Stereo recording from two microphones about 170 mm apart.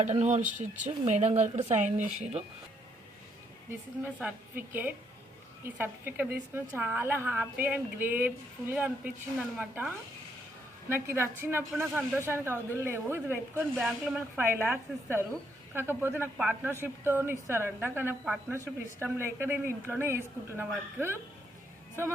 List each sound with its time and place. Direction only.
0.0 s speech: 45° right (ahead or behind)
4.2 s a woman's voice: 10° right (ahead or behind)
10.8 s a woman's voice: 15° right (ahead or behind)